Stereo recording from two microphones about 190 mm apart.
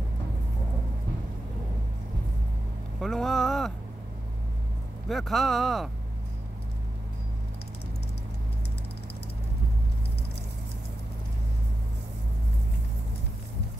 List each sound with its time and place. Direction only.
3.0 s speech: centre (ahead or behind)
5.0 s speech: centre (ahead or behind)